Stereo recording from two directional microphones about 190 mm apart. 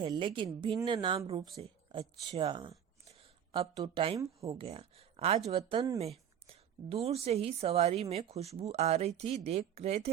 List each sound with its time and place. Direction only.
0.0 s a woman's voice: 25° right (ahead or behind)